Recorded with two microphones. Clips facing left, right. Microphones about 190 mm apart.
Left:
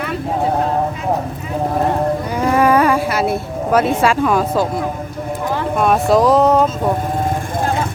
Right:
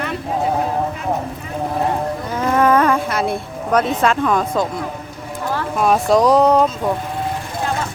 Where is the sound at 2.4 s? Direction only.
10° left (ahead or behind).